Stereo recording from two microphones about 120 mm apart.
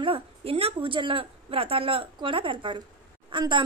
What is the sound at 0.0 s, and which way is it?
A woman's voice, 50° right (ahead or behind).